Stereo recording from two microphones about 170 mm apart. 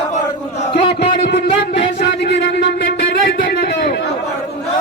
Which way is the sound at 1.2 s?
70° left (ahead or behind).